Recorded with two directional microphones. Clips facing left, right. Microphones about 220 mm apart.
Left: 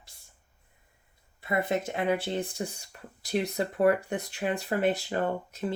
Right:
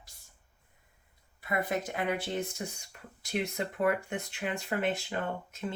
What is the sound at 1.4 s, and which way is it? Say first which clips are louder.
Speech: left 4 dB; 25° left (ahead or behind).